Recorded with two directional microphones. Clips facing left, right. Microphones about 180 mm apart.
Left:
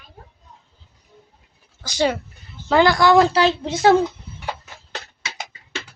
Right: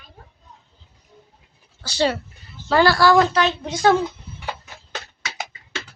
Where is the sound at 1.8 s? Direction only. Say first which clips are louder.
Left 1 dB; 10° left (ahead or behind).